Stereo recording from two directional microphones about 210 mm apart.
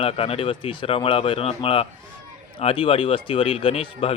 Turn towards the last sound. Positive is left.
turn(degrees=25)  # may be behind; listen again after turning